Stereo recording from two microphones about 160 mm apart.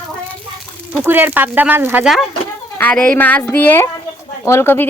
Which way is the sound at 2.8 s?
10° left (ahead or behind).